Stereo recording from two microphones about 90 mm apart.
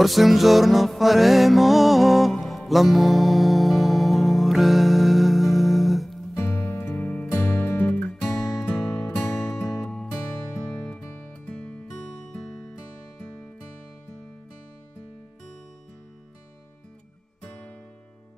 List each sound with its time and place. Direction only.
0.0 s music: centre (ahead or behind)
6.3 s music: 30° left (ahead or behind)
7.7 s music: 15° left (ahead or behind)
8.3 s music: 35° left (ahead or behind)
9.8 s music: 10° left (ahead or behind)
10.1 s music: 40° left (ahead or behind)
11.4 s music: 15° left (ahead or behind)
17.4 s music: 15° left (ahead or behind)